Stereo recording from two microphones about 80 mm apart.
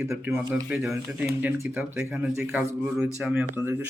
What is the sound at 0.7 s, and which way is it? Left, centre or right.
Speech, centre.